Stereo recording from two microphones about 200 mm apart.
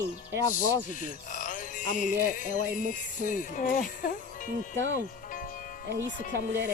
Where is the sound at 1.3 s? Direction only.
40° left (ahead or behind).